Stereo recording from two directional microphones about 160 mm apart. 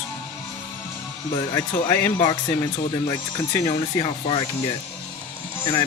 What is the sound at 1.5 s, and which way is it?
Speech, 15° left (ahead or behind).